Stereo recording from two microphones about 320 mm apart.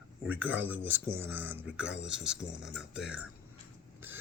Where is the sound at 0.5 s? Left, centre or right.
Centre.